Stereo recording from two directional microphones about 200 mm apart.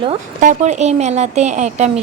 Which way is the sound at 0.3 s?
40° right (ahead or behind).